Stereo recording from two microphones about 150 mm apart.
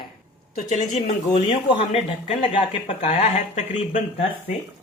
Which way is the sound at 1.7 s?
40° left (ahead or behind).